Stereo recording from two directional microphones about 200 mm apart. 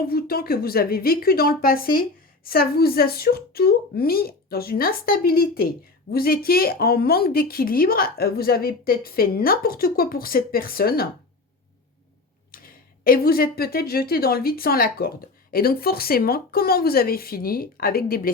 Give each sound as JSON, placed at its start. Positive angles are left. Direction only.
{"t": 0.0, "sound": "a woman's voice", "side_deg": 50}
{"t": 12.5, "sound": "a woman's voice", "side_deg": 45}